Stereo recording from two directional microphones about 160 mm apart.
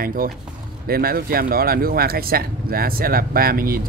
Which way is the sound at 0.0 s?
60° right (ahead or behind).